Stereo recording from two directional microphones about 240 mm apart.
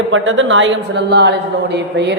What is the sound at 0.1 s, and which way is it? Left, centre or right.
A woman's voice, right.